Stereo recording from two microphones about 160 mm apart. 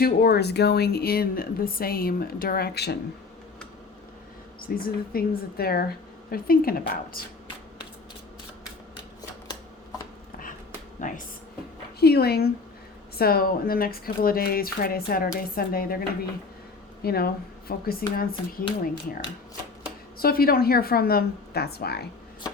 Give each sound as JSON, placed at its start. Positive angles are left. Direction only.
{"t": 0.0, "sound": "speech", "side_deg": 75}
{"t": 4.6, "sound": "a woman's voice", "side_deg": 70}
{"t": 11.0, "sound": "speech", "side_deg": 50}
{"t": 11.9, "sound": "speech", "side_deg": 80}
{"t": 20.1, "sound": "speech", "side_deg": 70}